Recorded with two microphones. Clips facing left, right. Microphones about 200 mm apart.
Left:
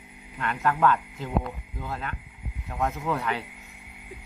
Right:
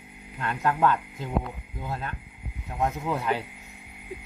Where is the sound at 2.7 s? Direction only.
20° right (ahead or behind).